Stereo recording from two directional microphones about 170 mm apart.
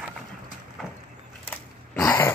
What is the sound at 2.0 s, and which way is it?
Dog, 10° left (ahead or behind).